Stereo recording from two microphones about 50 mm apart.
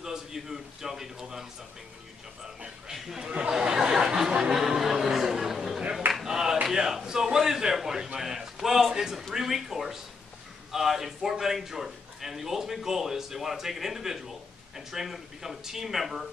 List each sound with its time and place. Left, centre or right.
0.0 s a man's voice: centre
2.4 s a man's voice: centre
4.6 s a sound: centre
6.1 s a man's voice: centre